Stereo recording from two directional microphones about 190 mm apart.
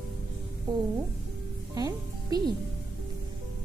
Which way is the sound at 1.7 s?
20° right (ahead or behind).